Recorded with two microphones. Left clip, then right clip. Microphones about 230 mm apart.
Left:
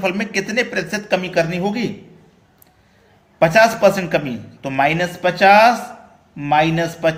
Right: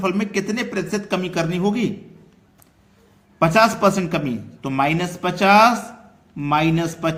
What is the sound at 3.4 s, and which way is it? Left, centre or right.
Speech, right.